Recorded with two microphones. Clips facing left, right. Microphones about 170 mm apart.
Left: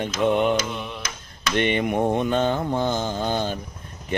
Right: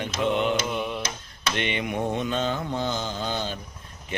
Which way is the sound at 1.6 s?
50° left (ahead or behind).